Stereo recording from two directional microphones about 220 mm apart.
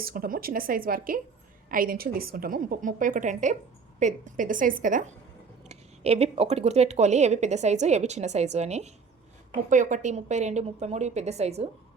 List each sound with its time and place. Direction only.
0.0 s speech: 40° right (ahead or behind)